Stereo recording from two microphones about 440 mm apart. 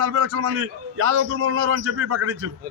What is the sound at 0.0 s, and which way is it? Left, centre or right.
A man's voice, right.